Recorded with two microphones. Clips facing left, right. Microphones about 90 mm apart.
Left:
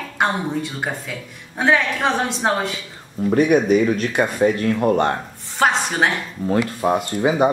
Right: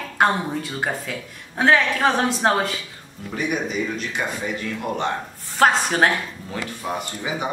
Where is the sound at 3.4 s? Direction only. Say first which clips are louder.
Left 9 dB; 50° left (ahead or behind).